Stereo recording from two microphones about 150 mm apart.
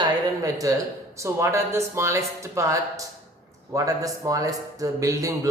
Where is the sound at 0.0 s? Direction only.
20° right (ahead or behind).